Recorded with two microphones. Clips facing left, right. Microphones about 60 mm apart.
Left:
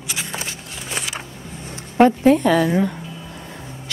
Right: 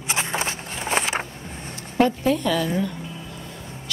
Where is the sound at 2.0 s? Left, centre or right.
Left.